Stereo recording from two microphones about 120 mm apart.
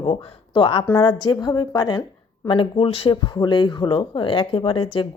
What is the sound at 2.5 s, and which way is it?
Speech, 45° left (ahead or behind).